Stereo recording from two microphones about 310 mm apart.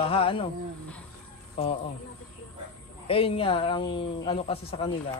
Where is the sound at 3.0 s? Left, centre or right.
Centre.